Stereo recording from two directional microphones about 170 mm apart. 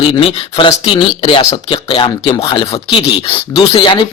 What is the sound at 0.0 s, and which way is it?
Speech, 30° left (ahead or behind).